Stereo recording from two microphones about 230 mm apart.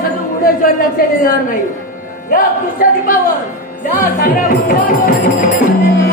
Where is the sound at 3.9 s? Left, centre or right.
Left.